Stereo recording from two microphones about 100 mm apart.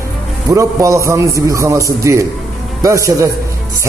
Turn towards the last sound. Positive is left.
turn(degrees=-35)  # may be behind; listen again after turning